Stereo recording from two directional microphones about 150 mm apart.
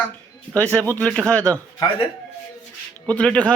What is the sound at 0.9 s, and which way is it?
Speech, 10° left (ahead or behind).